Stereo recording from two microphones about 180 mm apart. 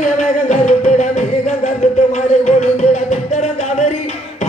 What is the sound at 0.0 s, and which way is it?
Music, 40° left (ahead or behind).